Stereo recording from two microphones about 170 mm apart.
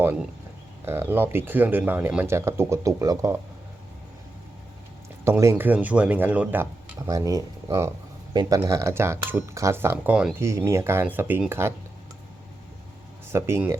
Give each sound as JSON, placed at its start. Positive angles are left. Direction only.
{"t": 0.0, "sound": "speech", "side_deg": -10}
{"t": 5.2, "sound": "speech", "side_deg": -15}
{"t": 13.3, "sound": "speech", "side_deg": -15}